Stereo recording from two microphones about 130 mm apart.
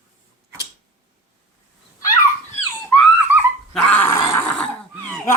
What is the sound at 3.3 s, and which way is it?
Dog, 15° right (ahead or behind).